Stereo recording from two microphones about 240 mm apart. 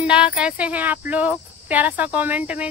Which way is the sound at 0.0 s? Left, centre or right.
Centre.